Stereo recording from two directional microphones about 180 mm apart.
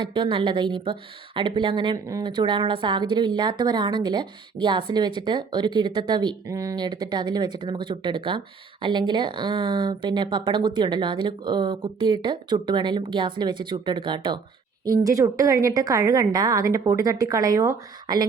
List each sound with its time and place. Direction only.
0.0 s a woman's voice: 25° right (ahead or behind)